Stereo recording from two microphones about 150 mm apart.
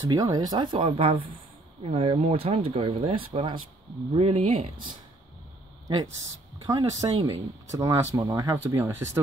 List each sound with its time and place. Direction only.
0.1 s speech: 25° right (ahead or behind)
6.6 s speech: 25° right (ahead or behind)